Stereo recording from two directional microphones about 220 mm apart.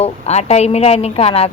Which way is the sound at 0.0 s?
30° left (ahead or behind).